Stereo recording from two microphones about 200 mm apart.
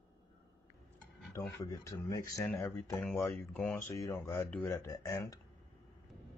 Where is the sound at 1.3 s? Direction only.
15° left (ahead or behind).